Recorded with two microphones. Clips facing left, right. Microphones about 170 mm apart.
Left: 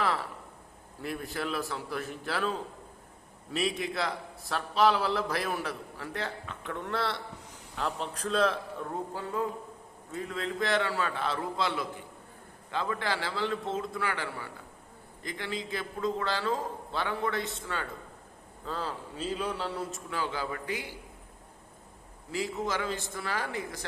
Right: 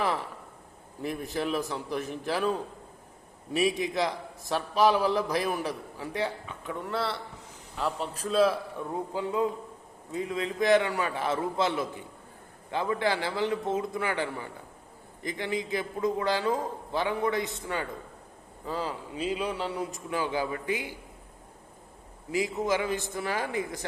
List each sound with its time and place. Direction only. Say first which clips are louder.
0.0 s a sound: right 1 dB; 15° right (ahead or behind)
1.0 s a man's voice: right 4 dB; 20° right (ahead or behind)
9.1 s a man's voice: right 6 dB; 15° right (ahead or behind)
22.3 s a man's voice: right 5 dB; 15° right (ahead or behind)